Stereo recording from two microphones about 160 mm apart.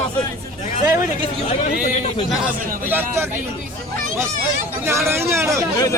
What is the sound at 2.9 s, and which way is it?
Speech, 10° right (ahead or behind).